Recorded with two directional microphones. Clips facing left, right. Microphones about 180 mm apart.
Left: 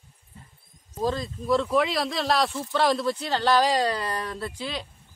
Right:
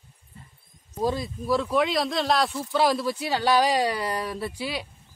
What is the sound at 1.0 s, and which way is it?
A man's voice, 10° right (ahead or behind).